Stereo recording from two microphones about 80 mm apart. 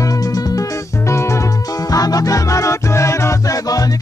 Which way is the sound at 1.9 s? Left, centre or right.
Left.